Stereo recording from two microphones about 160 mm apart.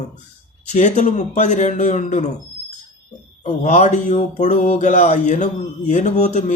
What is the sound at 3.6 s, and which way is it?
A man's voice, 50° left (ahead or behind).